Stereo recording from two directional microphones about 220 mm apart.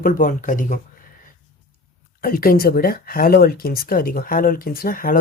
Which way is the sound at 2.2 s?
40° left (ahead or behind).